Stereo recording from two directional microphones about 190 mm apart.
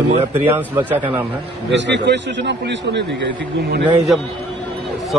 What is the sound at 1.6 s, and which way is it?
A man's voice, 70° right (ahead or behind).